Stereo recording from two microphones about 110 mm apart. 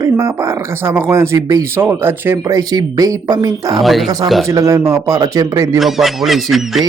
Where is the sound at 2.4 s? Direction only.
30° right (ahead or behind).